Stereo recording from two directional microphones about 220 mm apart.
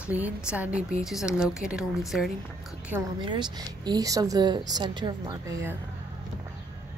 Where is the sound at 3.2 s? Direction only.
20° right (ahead or behind).